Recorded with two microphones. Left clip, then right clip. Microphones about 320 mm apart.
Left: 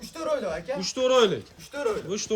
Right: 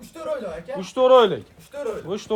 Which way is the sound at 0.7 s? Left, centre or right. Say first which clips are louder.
Right 7 dB; centre.